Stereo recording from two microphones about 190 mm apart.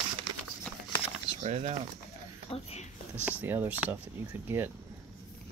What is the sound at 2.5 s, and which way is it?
Speech, 35° left (ahead or behind).